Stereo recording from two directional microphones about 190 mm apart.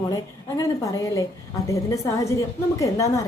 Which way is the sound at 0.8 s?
20° left (ahead or behind).